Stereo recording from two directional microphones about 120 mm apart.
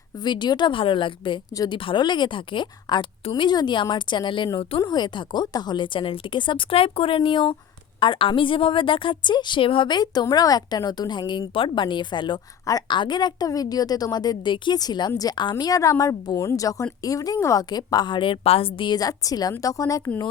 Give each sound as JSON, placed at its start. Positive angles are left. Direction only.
{"t": 0.2, "sound": "a woman's voice", "side_deg": 40}